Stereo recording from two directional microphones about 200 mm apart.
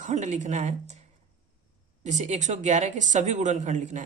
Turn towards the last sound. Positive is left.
turn(degrees=-35)  # may be behind; listen again after turning